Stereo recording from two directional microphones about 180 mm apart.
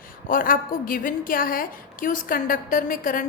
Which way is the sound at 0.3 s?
50° left (ahead or behind).